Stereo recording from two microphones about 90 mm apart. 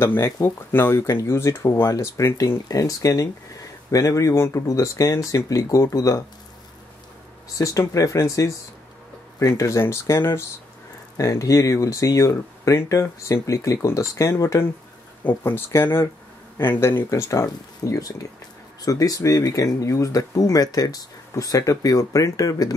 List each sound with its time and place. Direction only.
0.0 s speech: 30° left (ahead or behind)
7.5 s speech: 35° left (ahead or behind)
9.6 s speech: 30° left (ahead or behind)